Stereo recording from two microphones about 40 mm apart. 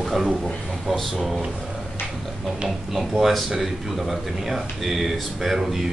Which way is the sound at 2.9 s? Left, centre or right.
Centre.